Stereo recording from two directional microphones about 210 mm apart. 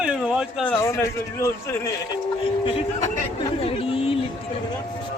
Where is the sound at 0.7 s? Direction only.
15° left (ahead or behind).